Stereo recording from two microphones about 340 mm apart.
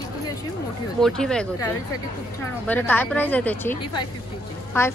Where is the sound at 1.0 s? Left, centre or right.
Centre.